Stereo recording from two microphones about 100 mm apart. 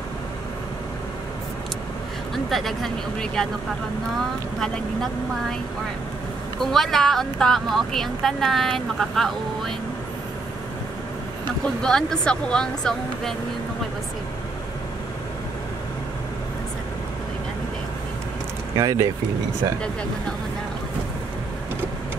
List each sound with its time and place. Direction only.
2.3 s speech: centre (ahead or behind)
4.6 s speech: 5° left (ahead or behind)
6.6 s speech: 5° left (ahead or behind)
11.6 s speech: 5° left (ahead or behind)
18.8 s speech: 35° right (ahead or behind)